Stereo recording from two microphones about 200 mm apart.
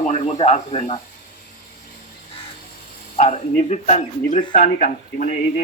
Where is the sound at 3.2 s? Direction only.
35° left (ahead or behind).